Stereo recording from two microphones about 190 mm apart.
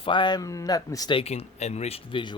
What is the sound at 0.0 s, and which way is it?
Speech, 25° left (ahead or behind).